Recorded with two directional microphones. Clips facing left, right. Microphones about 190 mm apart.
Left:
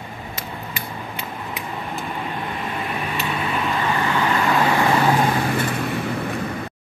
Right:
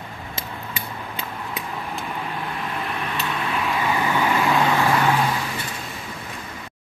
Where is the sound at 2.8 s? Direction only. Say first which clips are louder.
Left 2 dB; 5° left (ahead or behind).